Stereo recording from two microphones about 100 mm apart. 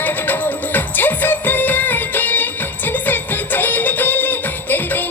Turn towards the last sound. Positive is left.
turn(degrees=20)  # may be behind; listen again after turning